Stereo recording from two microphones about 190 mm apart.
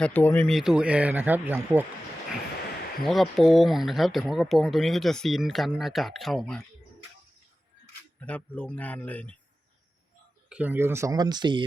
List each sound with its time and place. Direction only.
0.0 s speech: 5° left (ahead or behind); by 1.8 s 10° right (ahead or behind)
3.0 s speech: centre (ahead or behind)
8.2 s speech: 5° left (ahead or behind)
10.5 s speech: 10° right (ahead or behind)